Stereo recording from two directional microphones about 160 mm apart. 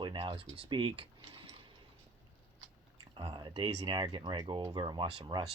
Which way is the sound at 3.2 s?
30° right (ahead or behind).